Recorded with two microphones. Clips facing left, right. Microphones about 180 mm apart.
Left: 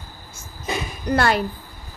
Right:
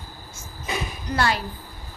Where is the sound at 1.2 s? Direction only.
55° left (ahead or behind).